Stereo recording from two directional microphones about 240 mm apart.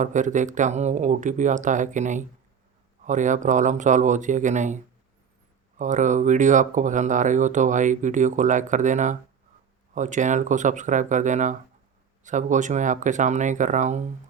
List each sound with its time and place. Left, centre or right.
0.0 s speech: right